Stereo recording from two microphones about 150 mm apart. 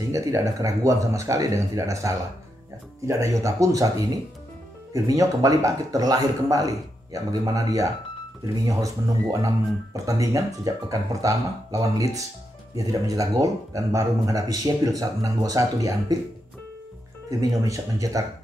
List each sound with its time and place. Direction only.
0.1 s a man's voice: 20° right (ahead or behind)
4.9 s a man's voice: 20° right (ahead or behind)
17.3 s a man's voice: 25° right (ahead or behind)